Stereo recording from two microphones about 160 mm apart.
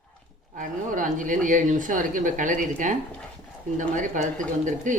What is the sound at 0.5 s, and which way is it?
A woman's voice, 55° right (ahead or behind).